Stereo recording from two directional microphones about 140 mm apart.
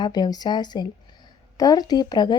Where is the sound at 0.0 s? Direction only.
30° left (ahead or behind).